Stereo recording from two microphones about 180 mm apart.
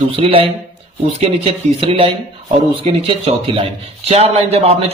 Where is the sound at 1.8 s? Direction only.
30° right (ahead or behind).